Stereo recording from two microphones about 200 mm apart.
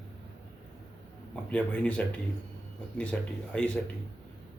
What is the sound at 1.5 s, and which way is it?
Speech, 5° left (ahead or behind).